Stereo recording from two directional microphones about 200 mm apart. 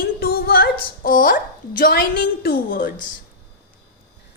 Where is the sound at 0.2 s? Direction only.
50° left (ahead or behind).